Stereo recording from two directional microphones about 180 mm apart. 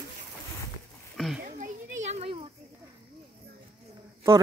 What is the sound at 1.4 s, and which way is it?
Children playing, 45° right (ahead or behind).